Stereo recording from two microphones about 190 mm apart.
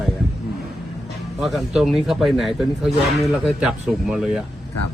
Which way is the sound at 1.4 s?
Centre (ahead or behind).